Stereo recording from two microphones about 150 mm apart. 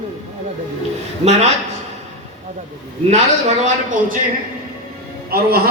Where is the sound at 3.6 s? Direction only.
60° right (ahead or behind).